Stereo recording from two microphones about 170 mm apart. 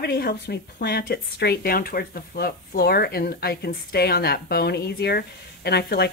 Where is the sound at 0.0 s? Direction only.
70° left (ahead or behind).